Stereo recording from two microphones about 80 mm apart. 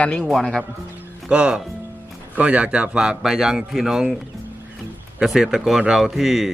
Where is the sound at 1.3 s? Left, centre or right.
Centre.